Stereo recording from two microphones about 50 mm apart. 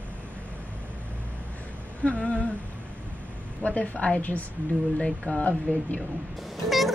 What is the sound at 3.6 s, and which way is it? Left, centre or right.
Speech, left.